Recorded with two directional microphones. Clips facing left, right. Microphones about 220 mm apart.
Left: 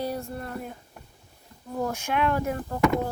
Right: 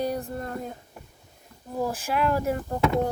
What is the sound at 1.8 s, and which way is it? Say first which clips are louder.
Speech: even; 5° right (ahead or behind).